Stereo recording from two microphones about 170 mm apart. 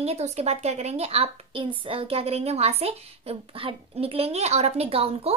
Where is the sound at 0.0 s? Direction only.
40° right (ahead or behind).